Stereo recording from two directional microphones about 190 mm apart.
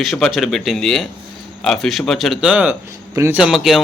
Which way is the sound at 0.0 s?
Centre (ahead or behind).